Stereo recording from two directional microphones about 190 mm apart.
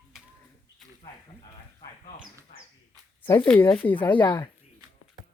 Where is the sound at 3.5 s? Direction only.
5° left (ahead or behind).